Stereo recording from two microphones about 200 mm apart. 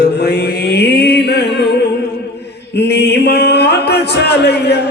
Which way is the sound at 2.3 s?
55° left (ahead or behind).